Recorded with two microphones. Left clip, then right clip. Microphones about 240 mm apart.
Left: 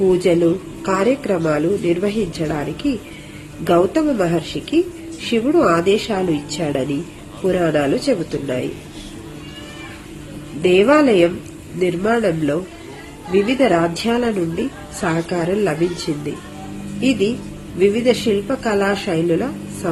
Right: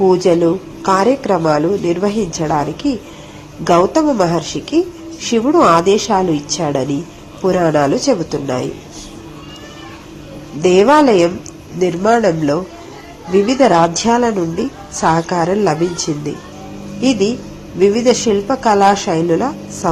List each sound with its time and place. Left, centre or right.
0.1 s a woman's voice: centre
10.6 s a woman's voice: centre
17.7 s a woman's voice: centre